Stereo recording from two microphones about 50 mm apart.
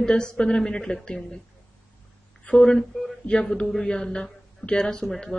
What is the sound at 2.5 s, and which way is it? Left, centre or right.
Speech, centre.